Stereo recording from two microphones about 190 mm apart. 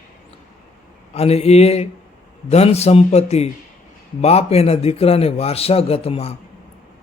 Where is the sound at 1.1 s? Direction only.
35° left (ahead or behind).